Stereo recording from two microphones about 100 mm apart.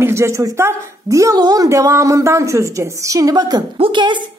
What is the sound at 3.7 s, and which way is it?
Speech, 60° right (ahead or behind).